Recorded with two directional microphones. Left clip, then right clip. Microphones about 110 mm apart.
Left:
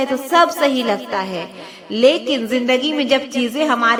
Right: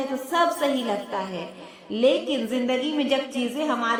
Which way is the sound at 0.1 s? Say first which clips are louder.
Left 7 dB; 30° left (ahead or behind).